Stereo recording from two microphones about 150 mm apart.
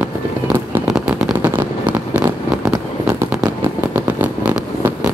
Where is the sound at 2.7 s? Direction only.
20° right (ahead or behind).